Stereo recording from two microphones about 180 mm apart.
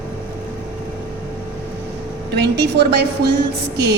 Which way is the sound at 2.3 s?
70° right (ahead or behind).